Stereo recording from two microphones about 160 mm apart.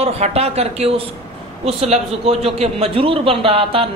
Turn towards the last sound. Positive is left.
turn(degrees=-35)  # may be behind; listen again after turning